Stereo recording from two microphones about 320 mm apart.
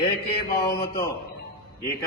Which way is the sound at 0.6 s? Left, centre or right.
Centre.